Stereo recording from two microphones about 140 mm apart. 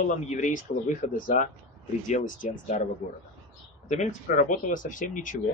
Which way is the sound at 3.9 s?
65° left (ahead or behind).